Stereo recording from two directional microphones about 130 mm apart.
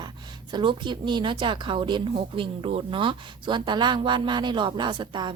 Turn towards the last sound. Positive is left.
turn(degrees=-35)  # may be behind; listen again after turning